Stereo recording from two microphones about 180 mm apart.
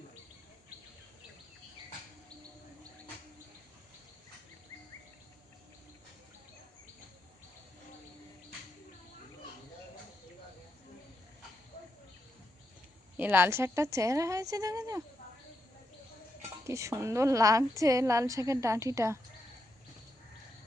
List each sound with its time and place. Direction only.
13.1 s a woman's voice: 10° right (ahead or behind)
16.6 s a woman's voice: 15° right (ahead or behind)